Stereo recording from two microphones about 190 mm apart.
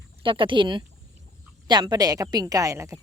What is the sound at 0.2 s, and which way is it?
A woman's voice, 25° right (ahead or behind).